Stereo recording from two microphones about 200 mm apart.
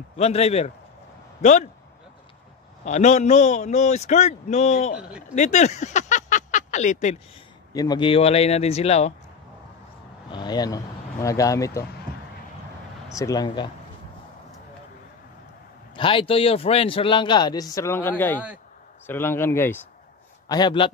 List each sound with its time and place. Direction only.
0.1 s a man's voice: 30° left (ahead or behind)
2.8 s a man's voice: 35° left (ahead or behind)
7.7 s a man's voice: 20° left (ahead or behind)
10.3 s speech: 20° left (ahead or behind)
13.1 s a man's voice: 15° left (ahead or behind)
16.0 s a man's voice: 25° left (ahead or behind)